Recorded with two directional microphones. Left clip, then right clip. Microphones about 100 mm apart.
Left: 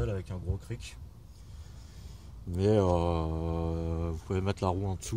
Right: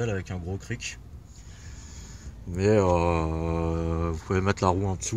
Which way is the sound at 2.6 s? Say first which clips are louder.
Right 5 dB; 45° left (ahead or behind).